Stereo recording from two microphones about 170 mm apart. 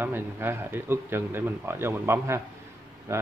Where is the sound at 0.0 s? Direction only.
15° right (ahead or behind).